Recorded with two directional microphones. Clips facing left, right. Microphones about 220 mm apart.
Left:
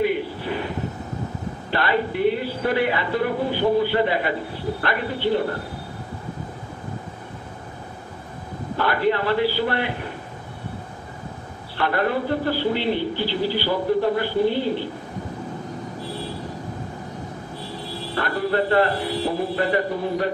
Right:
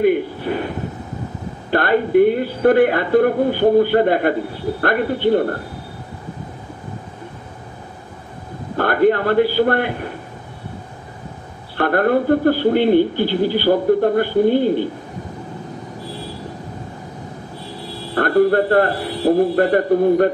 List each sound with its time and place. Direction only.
0.0 s a sound: 50° right (ahead or behind)
1.7 s a man's voice: 50° right (ahead or behind)
8.7 s a man's voice: 50° right (ahead or behind)
11.7 s a man's voice: 50° right (ahead or behind)
18.1 s a man's voice: 50° right (ahead or behind)